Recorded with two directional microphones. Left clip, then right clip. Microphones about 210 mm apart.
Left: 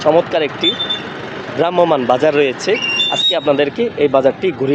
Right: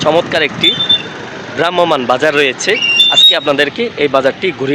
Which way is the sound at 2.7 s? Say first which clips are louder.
Right 7 dB; 15° left (ahead or behind).